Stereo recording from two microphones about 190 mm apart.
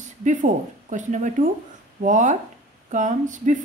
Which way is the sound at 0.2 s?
40° right (ahead or behind).